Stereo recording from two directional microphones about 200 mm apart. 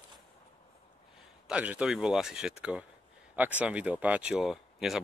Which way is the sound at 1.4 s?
5° right (ahead or behind).